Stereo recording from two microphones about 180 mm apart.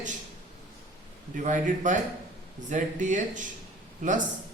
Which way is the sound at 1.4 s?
45° right (ahead or behind).